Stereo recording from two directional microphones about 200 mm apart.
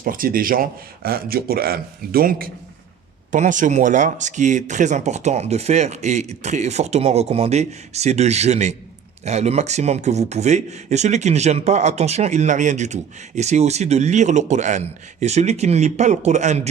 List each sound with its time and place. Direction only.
0.0 s a man's voice: 45° right (ahead or behind)